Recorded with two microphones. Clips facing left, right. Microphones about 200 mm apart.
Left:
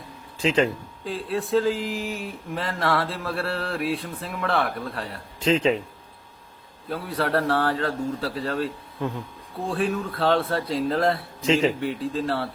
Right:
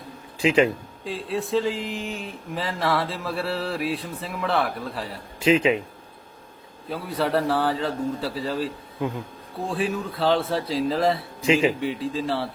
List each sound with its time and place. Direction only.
0.4 s speech: 10° right (ahead or behind)
1.0 s speech: centre (ahead or behind)
6.8 s speech: centre (ahead or behind)